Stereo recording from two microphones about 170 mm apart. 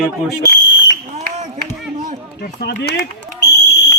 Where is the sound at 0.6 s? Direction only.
90° left.